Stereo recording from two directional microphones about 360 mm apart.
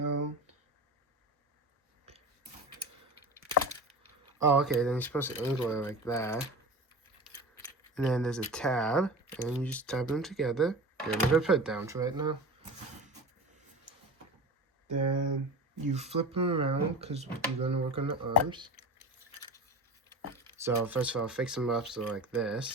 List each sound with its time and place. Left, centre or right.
4.4 s speech: centre
15.1 s speech: right
15.9 s speech: centre
20.6 s speech: centre